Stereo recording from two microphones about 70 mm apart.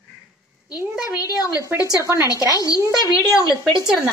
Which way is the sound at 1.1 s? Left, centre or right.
Left.